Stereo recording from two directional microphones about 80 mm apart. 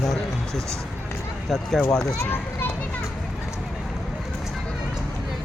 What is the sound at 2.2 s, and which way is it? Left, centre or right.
Speech, left.